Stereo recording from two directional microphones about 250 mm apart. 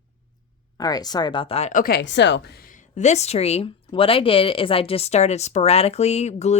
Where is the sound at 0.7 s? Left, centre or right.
Centre.